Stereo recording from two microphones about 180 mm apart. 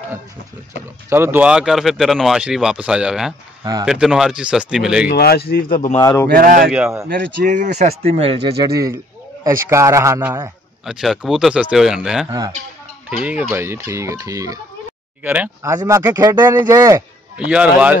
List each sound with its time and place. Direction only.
1.1 s speech: 10° right (ahead or behind)
5.0 s speech: 60° left (ahead or behind)
5.9 s a man's voice: 15° left (ahead or behind)
6.2 s speech: 50° right (ahead or behind); by 8.6 s 30° right (ahead or behind)
8.7 s bird: 20° right (ahead or behind)
9.7 s a man's voice: 15° right (ahead or behind)
12.3 s speech: 20° right (ahead or behind)
13.1 s speech: 10° right (ahead or behind)